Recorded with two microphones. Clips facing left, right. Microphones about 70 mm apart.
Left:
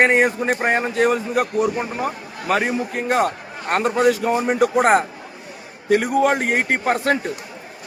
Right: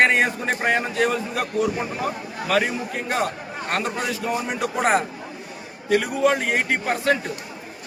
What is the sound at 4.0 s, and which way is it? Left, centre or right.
A man's voice, left.